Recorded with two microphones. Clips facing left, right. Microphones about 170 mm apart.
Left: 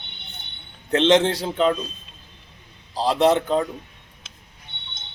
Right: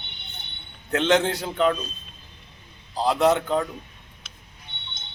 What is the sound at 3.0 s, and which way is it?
Speech, 25° left (ahead or behind).